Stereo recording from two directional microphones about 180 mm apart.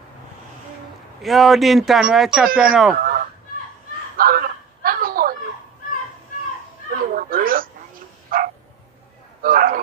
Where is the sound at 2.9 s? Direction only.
50° right (ahead or behind).